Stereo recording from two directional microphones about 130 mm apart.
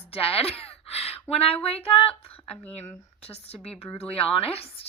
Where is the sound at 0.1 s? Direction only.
50° left (ahead or behind).